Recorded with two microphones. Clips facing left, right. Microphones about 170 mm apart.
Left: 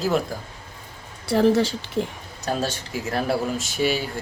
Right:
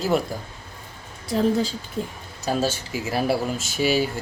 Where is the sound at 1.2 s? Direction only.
75° left (ahead or behind).